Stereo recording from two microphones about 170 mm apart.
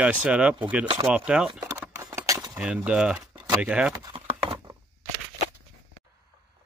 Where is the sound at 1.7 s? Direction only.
15° right (ahead or behind).